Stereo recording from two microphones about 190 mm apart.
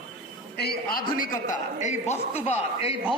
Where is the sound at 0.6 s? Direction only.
55° left (ahead or behind).